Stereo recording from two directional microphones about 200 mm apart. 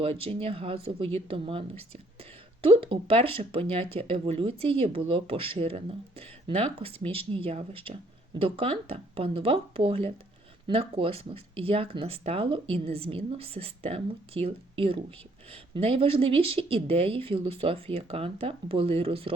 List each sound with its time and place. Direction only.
0.0 s speech: 30° right (ahead or behind)